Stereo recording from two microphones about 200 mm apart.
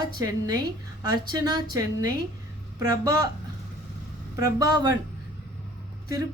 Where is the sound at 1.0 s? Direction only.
20° right (ahead or behind).